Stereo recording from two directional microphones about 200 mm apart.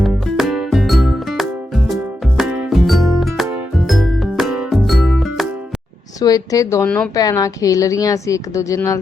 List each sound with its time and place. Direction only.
0.0 s music: centre (ahead or behind)
6.1 s a woman's voice: 15° left (ahead or behind)
6.8 s speech: 5° left (ahead or behind)
7.2 s a woman's voice: 15° left (ahead or behind)